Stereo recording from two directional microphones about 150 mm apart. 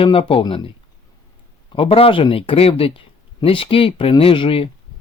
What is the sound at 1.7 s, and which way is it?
Speech, 35° left (ahead or behind).